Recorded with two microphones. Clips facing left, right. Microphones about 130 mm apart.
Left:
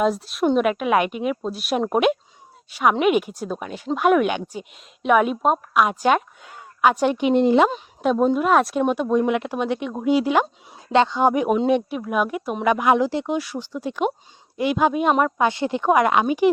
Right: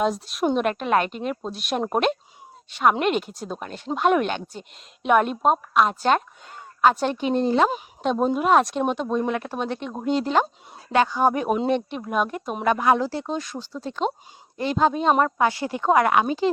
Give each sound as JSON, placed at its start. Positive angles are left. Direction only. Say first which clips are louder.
{"t": 0.0, "sound": "a woman's voice", "louder": "left 3 dB", "side_deg": 0}
{"t": 8.0, "sound": "speech", "louder": "left 3 dB", "side_deg": 0}
{"t": 10.9, "sound": "speech", "louder": "left 2 dB", "side_deg": 25}